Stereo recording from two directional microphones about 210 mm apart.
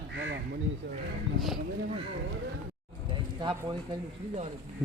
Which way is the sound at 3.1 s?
20° right (ahead or behind).